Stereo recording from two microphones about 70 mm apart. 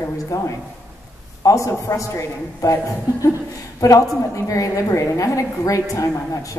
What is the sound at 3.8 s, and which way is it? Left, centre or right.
A woman's voice, left.